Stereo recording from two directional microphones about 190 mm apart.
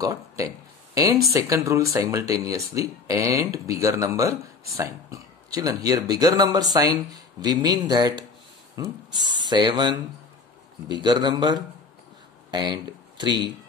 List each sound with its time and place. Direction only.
0.0 s speech: 15° right (ahead or behind)